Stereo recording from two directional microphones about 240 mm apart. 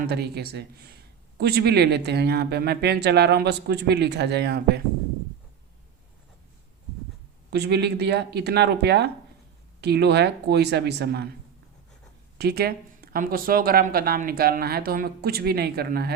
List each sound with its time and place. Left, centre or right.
0.1 s speech: right
7.5 s speech: right
12.4 s speech: right